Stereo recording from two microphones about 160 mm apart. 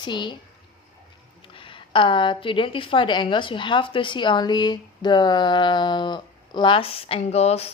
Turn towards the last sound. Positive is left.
turn(degrees=40)  # may be behind; listen again after turning